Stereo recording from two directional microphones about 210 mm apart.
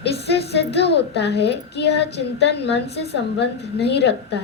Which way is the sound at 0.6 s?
55° left (ahead or behind).